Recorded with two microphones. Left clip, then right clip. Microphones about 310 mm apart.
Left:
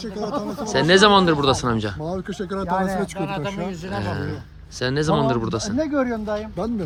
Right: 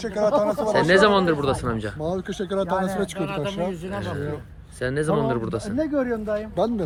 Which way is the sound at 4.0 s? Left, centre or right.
Centre.